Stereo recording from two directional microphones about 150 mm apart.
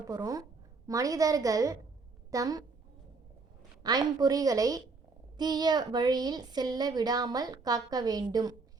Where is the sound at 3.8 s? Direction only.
25° right (ahead or behind).